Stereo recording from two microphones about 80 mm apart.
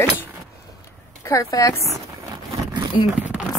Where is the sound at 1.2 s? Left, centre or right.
Left.